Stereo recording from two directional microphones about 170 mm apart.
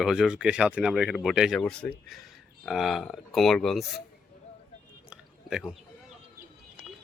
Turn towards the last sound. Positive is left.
turn(degrees=-5)  # may be behind; listen again after turning